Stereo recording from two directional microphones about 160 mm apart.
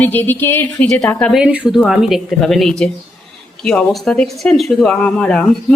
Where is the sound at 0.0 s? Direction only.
10° left (ahead or behind).